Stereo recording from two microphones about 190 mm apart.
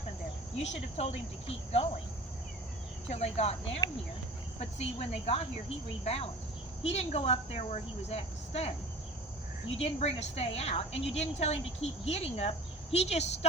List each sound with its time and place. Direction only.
0.6 s a woman's voice: 35° left (ahead or behind)
3.1 s a woman's voice: 35° left (ahead or behind)